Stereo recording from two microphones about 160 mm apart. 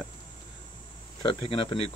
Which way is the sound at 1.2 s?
30° left (ahead or behind).